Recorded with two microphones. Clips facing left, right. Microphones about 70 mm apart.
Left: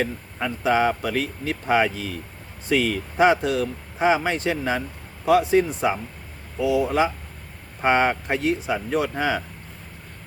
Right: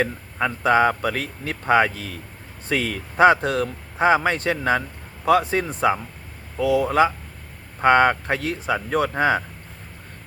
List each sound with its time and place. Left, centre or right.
0.0 s speech: right